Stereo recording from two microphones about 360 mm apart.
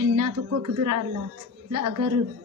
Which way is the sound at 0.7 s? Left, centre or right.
Right.